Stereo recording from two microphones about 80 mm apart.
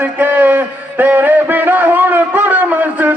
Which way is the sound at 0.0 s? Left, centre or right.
Right.